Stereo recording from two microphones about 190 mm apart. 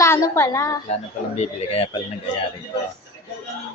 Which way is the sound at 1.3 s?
30° left (ahead or behind).